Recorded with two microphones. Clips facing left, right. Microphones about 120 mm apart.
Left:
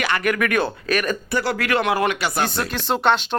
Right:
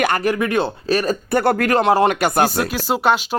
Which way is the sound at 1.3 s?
50° right (ahead or behind).